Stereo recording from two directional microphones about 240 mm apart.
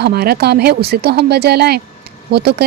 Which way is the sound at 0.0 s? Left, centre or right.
Right.